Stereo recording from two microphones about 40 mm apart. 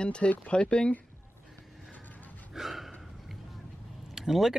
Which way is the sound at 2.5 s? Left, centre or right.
Centre.